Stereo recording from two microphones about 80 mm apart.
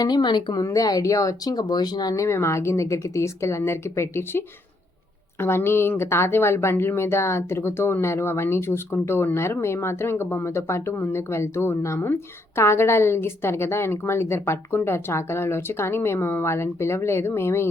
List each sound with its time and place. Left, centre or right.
0.0 s a woman's voice: left
0.6 s speech: left
2.1 s speech: left